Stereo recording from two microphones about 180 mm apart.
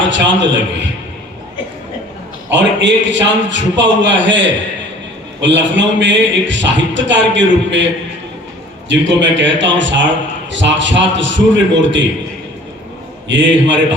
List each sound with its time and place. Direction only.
0.0 s a man's voice: 85° right
2.5 s a man's voice: 90° right
8.9 s a man's voice: 90° right
13.2 s a man's voice: 90° right